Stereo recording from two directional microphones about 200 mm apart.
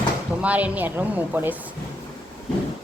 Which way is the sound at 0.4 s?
5° right (ahead or behind).